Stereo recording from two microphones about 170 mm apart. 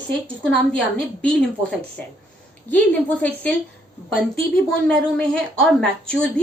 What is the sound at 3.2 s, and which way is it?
Speech, 10° left (ahead or behind).